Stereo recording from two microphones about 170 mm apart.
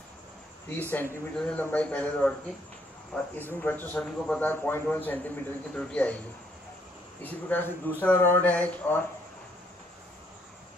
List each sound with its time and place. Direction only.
0.7 s a man's voice: 10° left (ahead or behind)
3.6 s a man's voice: 10° left (ahead or behind)
7.2 s a man's voice: 10° left (ahead or behind)